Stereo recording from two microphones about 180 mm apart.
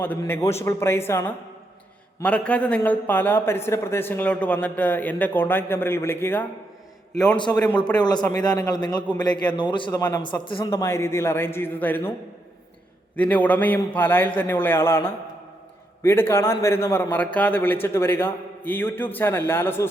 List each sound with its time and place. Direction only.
0.0 s a man's voice: 10° left (ahead or behind)
2.2 s a man's voice: 5° left (ahead or behind)
7.5 s a man's voice: 15° left (ahead or behind)
10.7 s a man's voice: 15° left (ahead or behind)
13.1 s a man's voice: 10° left (ahead or behind)